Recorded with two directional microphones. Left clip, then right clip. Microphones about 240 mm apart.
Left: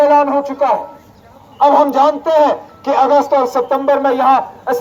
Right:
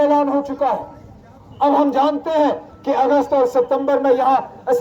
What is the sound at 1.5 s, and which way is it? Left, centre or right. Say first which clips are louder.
A man's voice: left 5 dB; left.